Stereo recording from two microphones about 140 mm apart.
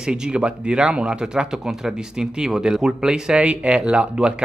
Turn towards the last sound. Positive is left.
turn(degrees=-5)  # may be behind; listen again after turning